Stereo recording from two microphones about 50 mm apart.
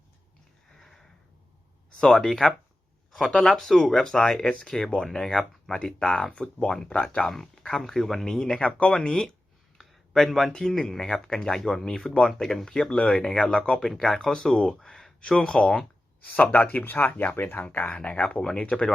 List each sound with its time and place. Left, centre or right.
0.8 s sniff: centre
2.0 s speech: centre
12.3 s speech: centre
16.2 s speech: left
17.7 s speech: left